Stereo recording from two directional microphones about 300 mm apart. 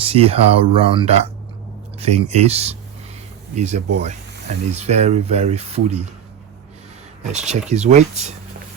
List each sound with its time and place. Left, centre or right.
0.0 s speech: centre
7.3 s speech: right